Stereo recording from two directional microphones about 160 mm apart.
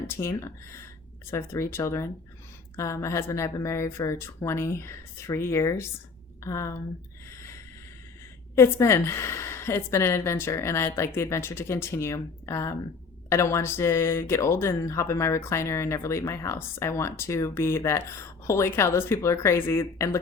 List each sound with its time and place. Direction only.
0.1 s a woman's voice: 15° left (ahead or behind)
7.3 s snort: 15° left (ahead or behind)
8.5 s speech: 15° left (ahead or behind)